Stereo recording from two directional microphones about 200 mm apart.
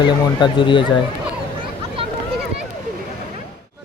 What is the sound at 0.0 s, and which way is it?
Speech, 25° left (ahead or behind).